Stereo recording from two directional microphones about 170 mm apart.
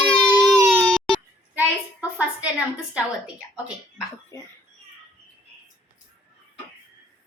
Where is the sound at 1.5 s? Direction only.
10° right (ahead or behind).